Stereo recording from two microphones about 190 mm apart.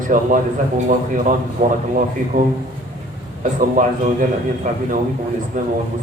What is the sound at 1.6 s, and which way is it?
Speech, 40° right (ahead or behind).